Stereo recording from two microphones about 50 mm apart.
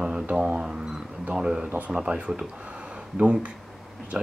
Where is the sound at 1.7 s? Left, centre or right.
Right.